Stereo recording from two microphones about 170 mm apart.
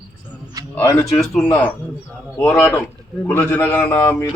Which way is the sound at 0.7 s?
15° left (ahead or behind).